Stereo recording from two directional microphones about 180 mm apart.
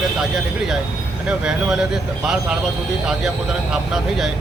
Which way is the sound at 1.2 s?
5° right (ahead or behind).